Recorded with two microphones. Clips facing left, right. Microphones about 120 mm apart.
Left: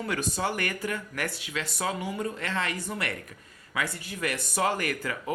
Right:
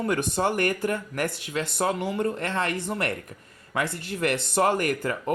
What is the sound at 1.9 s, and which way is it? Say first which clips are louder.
Speech: right 5 dB; 70° right (ahead or behind).